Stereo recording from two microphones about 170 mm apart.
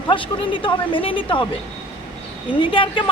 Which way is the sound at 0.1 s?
30° left (ahead or behind).